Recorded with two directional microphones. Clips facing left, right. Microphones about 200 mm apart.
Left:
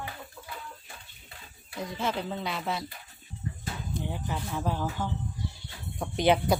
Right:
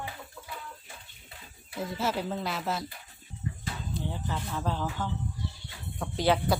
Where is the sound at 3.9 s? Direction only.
15° left (ahead or behind).